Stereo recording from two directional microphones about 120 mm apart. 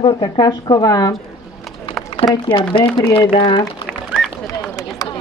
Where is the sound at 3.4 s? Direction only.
35° left (ahead or behind).